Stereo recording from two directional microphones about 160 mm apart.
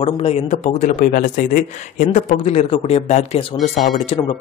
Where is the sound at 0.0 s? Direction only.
40° left (ahead or behind).